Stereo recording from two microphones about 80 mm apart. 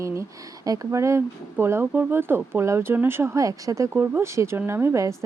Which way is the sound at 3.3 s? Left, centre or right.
Right.